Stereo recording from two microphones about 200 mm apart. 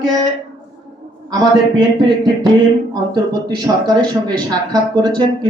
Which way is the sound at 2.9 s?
20° right (ahead or behind).